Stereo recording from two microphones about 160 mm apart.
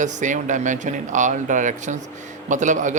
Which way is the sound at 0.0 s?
50° right (ahead or behind).